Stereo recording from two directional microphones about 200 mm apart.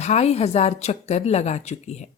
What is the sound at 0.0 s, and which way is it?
Speech, 35° left (ahead or behind).